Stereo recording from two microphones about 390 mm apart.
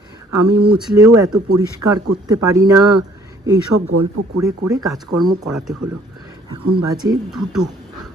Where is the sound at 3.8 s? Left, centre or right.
Right.